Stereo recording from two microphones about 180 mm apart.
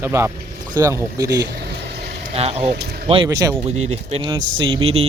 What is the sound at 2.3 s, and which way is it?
Speech, 35° right (ahead or behind).